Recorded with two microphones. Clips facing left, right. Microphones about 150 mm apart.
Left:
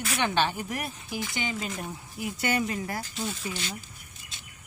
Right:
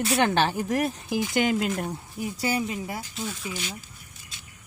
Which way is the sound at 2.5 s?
5° right (ahead or behind).